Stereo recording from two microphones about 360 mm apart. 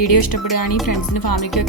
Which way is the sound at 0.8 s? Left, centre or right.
Left.